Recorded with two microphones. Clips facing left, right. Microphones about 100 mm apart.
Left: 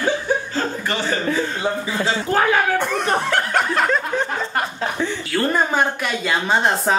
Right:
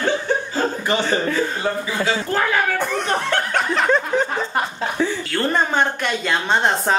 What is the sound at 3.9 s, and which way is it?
Chuckle, 10° right (ahead or behind).